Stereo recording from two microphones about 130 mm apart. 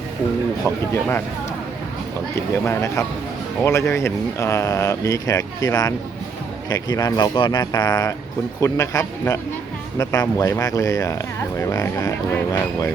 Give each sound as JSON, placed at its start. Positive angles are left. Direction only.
{"t": 2.3, "sound": "speech", "side_deg": 20}